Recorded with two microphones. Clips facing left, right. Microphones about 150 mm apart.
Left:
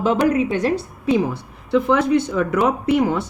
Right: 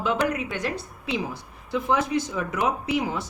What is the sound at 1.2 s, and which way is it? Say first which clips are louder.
Speech: left 8 dB; 65° left (ahead or behind).